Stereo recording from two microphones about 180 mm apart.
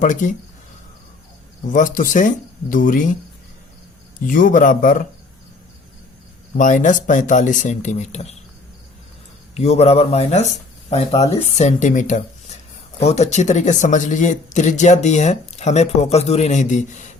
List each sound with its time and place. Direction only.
0.0 s speech: 45° left (ahead or behind)
1.7 s speech: 50° left (ahead or behind)
4.3 s speech: 50° left (ahead or behind)
6.6 s speech: 45° left (ahead or behind)
9.6 s speech: 35° left (ahead or behind)